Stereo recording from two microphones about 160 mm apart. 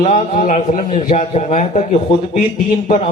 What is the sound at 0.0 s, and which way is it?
A man's voice, 45° left (ahead or behind).